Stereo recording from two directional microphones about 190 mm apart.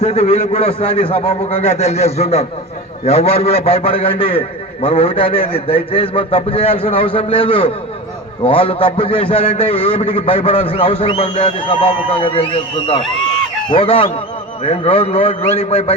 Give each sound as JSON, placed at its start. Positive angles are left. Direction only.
{"t": 0.0, "sound": "a man's voice", "side_deg": 35}